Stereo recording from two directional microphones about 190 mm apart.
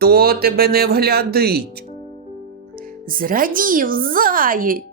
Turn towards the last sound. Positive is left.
turn(degrees=-50)  # may be behind; listen again after turning